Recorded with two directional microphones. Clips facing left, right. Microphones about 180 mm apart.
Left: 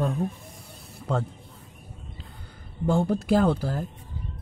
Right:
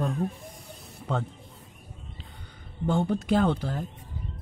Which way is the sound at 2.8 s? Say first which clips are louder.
Left 2 dB; 5° left (ahead or behind).